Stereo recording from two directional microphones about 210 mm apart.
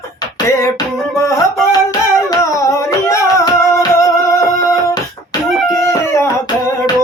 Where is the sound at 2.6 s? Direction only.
15° left (ahead or behind).